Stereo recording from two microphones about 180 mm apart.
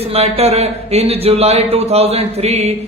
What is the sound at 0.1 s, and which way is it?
Speech, 35° right (ahead or behind).